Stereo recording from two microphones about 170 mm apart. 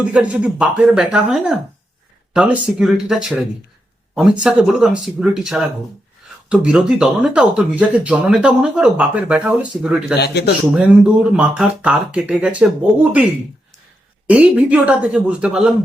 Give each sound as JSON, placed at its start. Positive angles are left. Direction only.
{"t": 0.0, "sound": "speech", "side_deg": -5}
{"t": 10.2, "sound": "speech", "side_deg": 75}
{"t": 10.8, "sound": "speech", "side_deg": -5}
{"t": 14.3, "sound": "speech", "side_deg": -10}